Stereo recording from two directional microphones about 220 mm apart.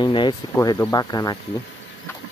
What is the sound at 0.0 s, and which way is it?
Speech, 20° left (ahead or behind).